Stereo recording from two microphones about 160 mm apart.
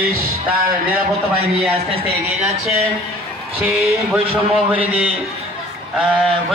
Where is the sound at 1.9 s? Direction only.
35° right (ahead or behind).